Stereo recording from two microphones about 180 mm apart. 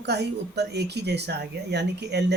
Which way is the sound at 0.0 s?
70° right (ahead or behind).